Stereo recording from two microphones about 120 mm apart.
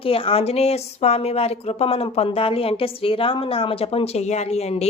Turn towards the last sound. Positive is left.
turn(degrees=65)  # may be behind; listen again after turning